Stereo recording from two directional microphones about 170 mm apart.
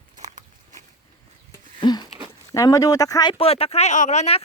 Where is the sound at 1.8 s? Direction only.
25° left (ahead or behind).